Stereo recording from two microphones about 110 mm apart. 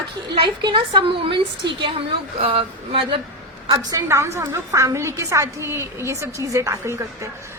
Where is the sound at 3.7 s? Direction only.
40° right (ahead or behind).